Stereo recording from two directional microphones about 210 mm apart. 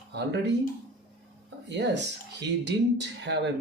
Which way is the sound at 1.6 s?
55° right (ahead or behind).